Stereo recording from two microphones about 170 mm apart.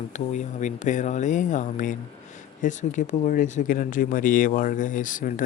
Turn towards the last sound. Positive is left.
turn(degrees=50)  # may be behind; listen again after turning